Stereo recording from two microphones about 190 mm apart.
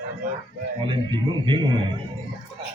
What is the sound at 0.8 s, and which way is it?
Speech, 25° right (ahead or behind).